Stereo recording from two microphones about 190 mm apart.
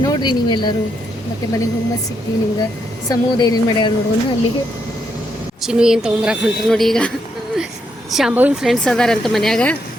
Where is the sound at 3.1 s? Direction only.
20° left (ahead or behind).